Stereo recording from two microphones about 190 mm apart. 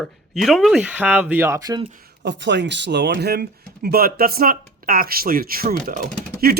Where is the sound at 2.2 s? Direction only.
65° right (ahead or behind).